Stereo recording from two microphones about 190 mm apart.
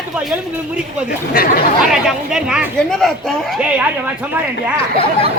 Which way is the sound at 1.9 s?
5° right (ahead or behind).